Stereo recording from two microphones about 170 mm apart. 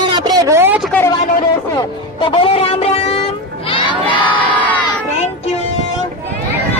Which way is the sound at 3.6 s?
30° left (ahead or behind).